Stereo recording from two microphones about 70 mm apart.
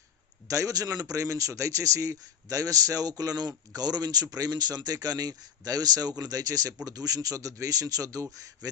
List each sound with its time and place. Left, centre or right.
0.4 s a man's voice: right